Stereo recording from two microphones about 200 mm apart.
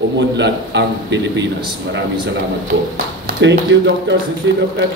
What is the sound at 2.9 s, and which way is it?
Speech, 65° right (ahead or behind).